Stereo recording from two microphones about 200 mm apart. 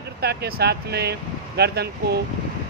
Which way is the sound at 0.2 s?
50° right (ahead or behind).